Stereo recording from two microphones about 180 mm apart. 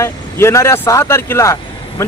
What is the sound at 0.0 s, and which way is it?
Speech, 15° left (ahead or behind).